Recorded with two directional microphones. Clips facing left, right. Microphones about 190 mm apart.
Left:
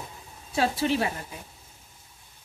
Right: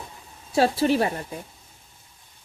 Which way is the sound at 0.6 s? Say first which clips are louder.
Right 5 dB; 40° right (ahead or behind).